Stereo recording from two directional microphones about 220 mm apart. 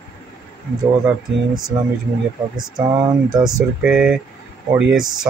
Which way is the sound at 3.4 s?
5° right (ahead or behind).